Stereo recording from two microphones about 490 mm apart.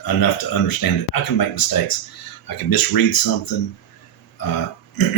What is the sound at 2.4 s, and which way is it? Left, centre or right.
Speech, left.